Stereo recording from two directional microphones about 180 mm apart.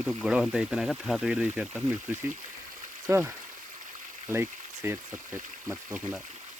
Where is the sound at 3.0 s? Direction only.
15° right (ahead or behind).